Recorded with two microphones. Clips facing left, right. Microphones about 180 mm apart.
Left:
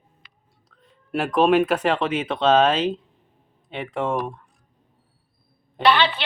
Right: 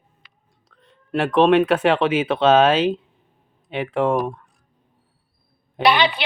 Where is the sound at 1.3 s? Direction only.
Centre (ahead or behind).